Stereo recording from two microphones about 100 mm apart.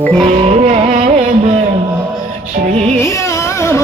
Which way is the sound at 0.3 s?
90° right.